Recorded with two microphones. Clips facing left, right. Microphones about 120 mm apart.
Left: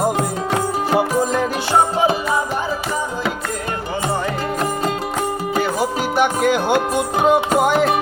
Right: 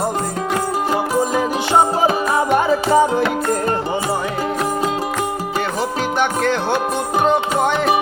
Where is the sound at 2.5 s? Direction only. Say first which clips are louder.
Right 8 dB; 75° right (ahead or behind).